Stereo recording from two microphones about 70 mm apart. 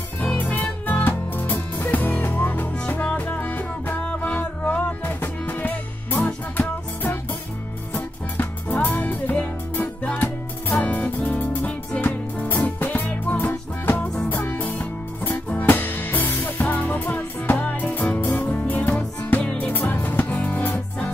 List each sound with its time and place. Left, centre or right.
0.2 s music: left